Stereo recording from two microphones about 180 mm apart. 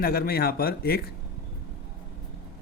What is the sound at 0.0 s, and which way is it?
Speech, 55° left (ahead or behind).